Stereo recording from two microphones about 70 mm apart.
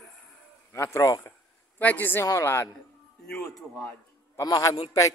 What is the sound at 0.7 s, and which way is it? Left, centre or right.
Speech, left.